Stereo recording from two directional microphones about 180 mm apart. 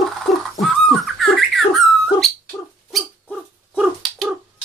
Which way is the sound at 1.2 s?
Centre (ahead or behind).